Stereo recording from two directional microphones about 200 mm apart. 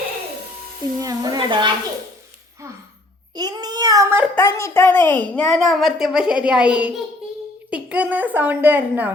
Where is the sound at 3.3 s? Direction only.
20° right (ahead or behind).